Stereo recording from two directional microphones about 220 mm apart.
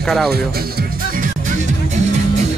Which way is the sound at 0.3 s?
40° right (ahead or behind).